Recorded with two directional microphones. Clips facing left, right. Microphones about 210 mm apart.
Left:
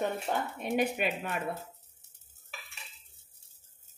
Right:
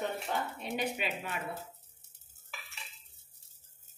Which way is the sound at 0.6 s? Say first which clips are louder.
Left 6 dB; 50° left (ahead or behind).